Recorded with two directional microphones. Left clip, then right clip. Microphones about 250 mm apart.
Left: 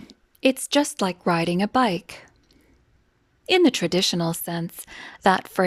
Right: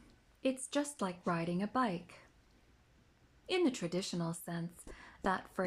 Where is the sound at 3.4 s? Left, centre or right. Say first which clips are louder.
Left 15 dB; left.